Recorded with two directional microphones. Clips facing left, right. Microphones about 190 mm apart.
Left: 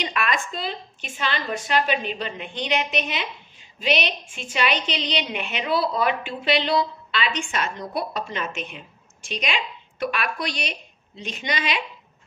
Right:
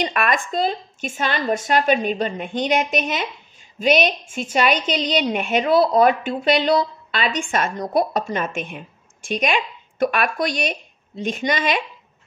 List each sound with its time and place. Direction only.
0.0 s a woman's voice: 50° right (ahead or behind)